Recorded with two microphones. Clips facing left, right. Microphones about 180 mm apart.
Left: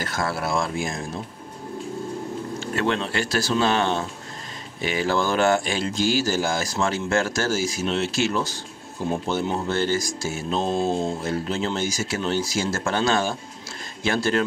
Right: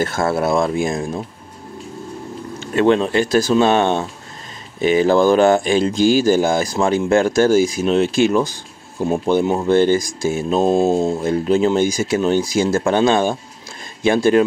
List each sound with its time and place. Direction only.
0.0 s speech: 25° right (ahead or behind)
2.6 s a sound: 20° right (ahead or behind)
3.1 s speech: 20° right (ahead or behind)
9.0 s mantra: 50° right (ahead or behind)
9.7 s speech: 15° right (ahead or behind)
10.6 s mantra: 45° right (ahead or behind)
11.2 s speech: 15° right (ahead or behind)